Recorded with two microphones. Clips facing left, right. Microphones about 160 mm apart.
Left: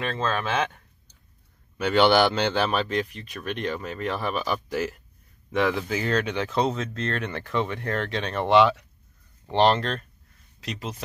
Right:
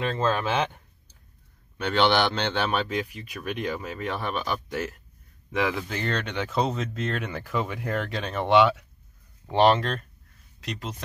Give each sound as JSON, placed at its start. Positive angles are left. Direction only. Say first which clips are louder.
{"t": 0.0, "sound": "speech", "louder": "right 2 dB", "side_deg": -15}
{"t": 1.8, "sound": "speech", "louder": "left 3 dB", "side_deg": 5}